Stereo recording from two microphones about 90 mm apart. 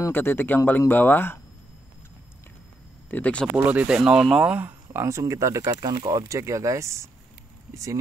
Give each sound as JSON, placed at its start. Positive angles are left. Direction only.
{"t": 0.1, "sound": "speech", "side_deg": 25}
{"t": 3.1, "sound": "speech", "side_deg": 15}
{"t": 3.5, "sound": "speech", "side_deg": -15}